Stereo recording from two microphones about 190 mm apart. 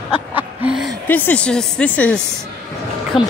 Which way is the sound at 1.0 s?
10° left (ahead or behind).